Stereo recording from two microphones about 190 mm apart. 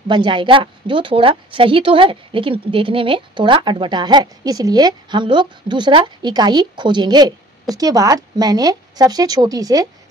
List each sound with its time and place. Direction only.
0.1 s a woman's voice: 25° right (ahead or behind)